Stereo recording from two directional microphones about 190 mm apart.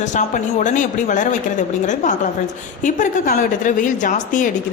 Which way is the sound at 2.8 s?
40° left (ahead or behind).